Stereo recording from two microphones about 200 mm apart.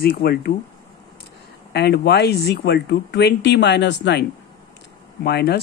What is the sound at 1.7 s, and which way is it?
Speech, 55° left (ahead or behind).